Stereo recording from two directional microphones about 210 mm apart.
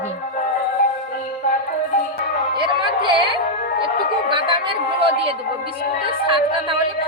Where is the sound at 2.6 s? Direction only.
25° right (ahead or behind).